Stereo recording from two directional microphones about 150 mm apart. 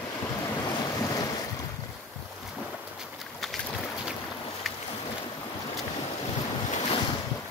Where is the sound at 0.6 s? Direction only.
25° left (ahead or behind).